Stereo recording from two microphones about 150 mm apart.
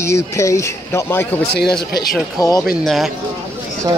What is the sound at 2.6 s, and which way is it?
Speech, centre (ahead or behind).